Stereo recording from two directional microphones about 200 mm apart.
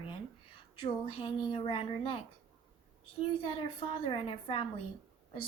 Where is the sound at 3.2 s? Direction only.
25° left (ahead or behind).